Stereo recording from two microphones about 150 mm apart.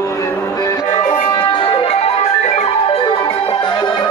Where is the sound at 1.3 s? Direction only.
35° left (ahead or behind).